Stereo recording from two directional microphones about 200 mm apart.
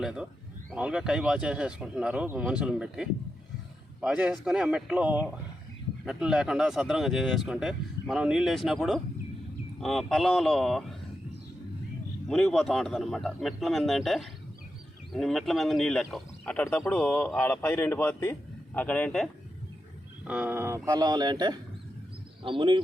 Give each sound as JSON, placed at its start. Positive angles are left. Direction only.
{"t": 0.0, "sound": "speech", "side_deg": -5}
{"t": 12.3, "sound": "a man's voice", "side_deg": 0}
{"t": 20.2, "sound": "speech", "side_deg": -5}